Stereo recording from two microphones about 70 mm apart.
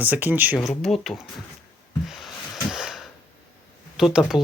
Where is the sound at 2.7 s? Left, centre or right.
Centre.